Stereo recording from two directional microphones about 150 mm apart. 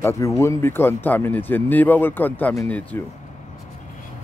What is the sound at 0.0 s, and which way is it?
Speech, 20° left (ahead or behind).